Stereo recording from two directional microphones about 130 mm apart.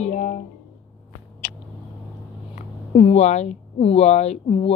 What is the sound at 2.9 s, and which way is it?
Speech, 50° left (ahead or behind).